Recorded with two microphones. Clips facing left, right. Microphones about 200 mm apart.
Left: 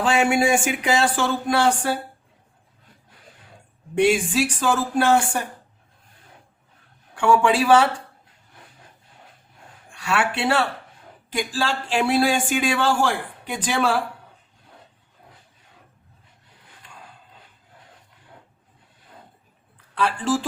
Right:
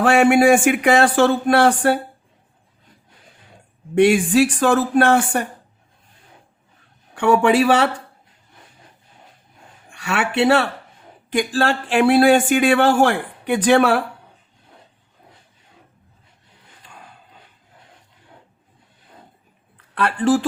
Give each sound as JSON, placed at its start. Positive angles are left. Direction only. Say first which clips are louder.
{"t": 0.0, "sound": "a man's voice", "louder": "right 6 dB", "side_deg": -60}
{"t": 3.9, "sound": "a man's voice", "louder": "right 5 dB", "side_deg": -60}
{"t": 7.2, "sound": "a man's voice", "louder": "right 3 dB", "side_deg": -60}
{"t": 9.9, "sound": "a man's voice", "louder": "right 2 dB", "side_deg": -60}
{"t": 19.7, "sound": "a sound", "louder": "right 2 dB", "side_deg": -60}